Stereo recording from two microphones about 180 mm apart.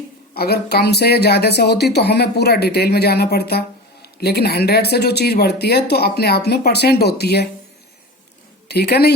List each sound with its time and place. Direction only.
0.3 s speech: 60° left (ahead or behind)
8.6 s a woman's voice: 65° left (ahead or behind)